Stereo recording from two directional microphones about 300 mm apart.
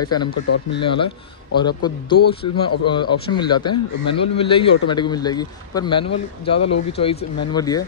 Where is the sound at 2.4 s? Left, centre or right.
Left.